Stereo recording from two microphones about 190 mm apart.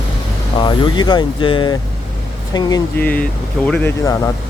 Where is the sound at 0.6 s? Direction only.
25° left (ahead or behind).